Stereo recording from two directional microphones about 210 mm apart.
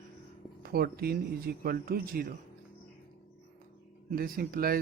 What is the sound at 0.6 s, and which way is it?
Speech, 45° right (ahead or behind).